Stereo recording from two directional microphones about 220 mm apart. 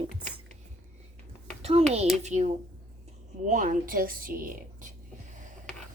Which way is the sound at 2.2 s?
30° right (ahead or behind).